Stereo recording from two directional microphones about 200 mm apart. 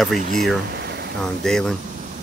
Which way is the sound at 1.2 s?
5° left (ahead or behind).